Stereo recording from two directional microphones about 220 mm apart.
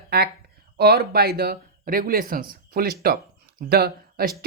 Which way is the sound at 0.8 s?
45° right (ahead or behind).